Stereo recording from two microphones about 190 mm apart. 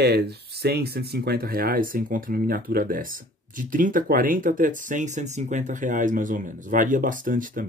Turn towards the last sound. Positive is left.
turn(degrees=-45)  # may be behind; listen again after turning